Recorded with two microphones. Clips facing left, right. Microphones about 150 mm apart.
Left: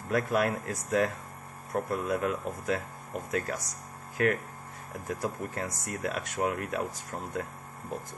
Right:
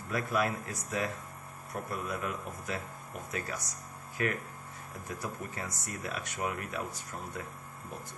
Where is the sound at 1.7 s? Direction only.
80° left.